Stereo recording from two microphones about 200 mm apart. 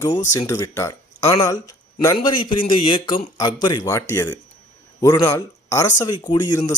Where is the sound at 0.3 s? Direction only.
15° left (ahead or behind).